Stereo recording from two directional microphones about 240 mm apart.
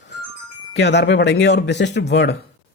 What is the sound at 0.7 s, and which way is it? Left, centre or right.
Speech, left.